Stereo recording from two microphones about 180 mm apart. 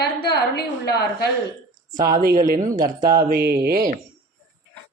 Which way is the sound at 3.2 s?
60° right (ahead or behind).